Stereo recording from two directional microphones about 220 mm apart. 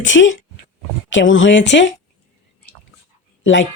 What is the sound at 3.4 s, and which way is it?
Speech, 60° left (ahead or behind).